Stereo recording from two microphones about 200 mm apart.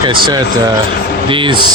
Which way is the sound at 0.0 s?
20° right (ahead or behind).